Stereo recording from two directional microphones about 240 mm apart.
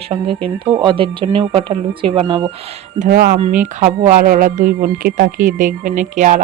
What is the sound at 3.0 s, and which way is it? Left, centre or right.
Speech, right.